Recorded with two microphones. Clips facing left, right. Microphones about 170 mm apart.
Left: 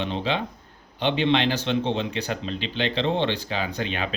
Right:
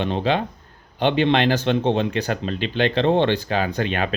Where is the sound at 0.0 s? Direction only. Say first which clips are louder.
Right 5 dB; 50° right (ahead or behind).